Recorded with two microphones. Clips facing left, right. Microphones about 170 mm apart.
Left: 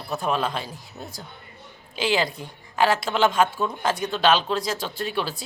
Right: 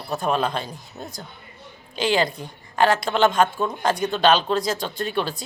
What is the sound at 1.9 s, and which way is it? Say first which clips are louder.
A woman's voice: right 2 dB; 5° left (ahead or behind).